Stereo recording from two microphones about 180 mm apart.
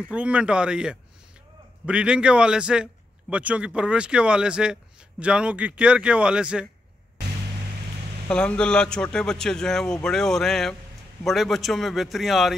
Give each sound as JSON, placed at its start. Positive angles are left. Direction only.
{"t": 0.1, "sound": "a man's voice", "side_deg": -5}
{"t": 8.3, "sound": "a man's voice", "side_deg": 5}